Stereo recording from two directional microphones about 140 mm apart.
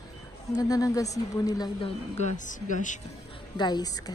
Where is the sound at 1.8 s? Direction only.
55° left (ahead or behind).